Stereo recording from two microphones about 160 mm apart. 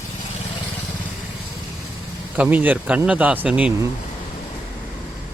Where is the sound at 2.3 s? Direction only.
10° right (ahead or behind).